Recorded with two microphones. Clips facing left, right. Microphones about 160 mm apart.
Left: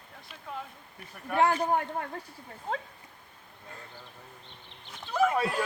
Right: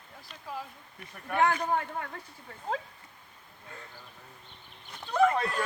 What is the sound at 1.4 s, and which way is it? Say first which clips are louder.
Speech: left 2 dB; 30° left (ahead or behind).